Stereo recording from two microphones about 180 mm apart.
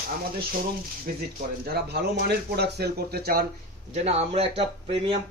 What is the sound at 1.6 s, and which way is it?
Speech, 65° right (ahead or behind).